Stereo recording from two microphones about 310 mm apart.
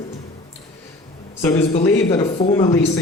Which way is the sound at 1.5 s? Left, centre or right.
Centre.